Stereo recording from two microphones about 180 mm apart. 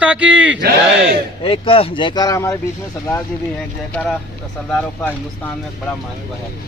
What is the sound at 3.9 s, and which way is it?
Speech, centre (ahead or behind).